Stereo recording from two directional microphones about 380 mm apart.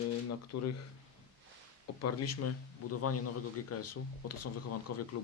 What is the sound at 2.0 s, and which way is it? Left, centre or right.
Speech, left.